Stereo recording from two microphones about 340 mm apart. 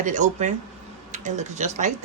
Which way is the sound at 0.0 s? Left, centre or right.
Right.